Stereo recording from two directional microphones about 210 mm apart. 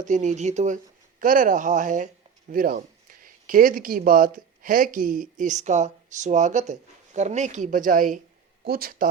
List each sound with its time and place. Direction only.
0.0 s speech: 35° right (ahead or behind)